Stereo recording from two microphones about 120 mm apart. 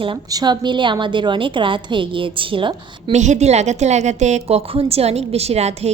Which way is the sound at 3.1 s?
75° right (ahead or behind).